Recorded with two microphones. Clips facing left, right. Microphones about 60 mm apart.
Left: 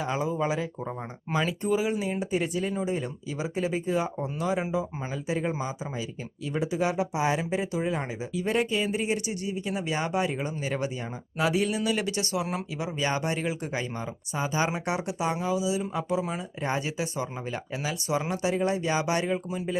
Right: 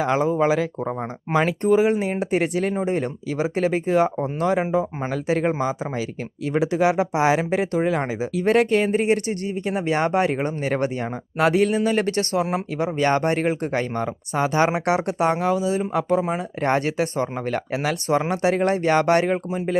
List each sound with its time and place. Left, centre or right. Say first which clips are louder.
0.0 s speech: right 8 dB; right
0.9 s speech: right 7 dB; right
12.7 s speech: right 9 dB; right
19.5 s speech: right 6 dB; right